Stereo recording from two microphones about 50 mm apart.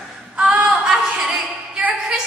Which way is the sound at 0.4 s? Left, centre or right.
Right.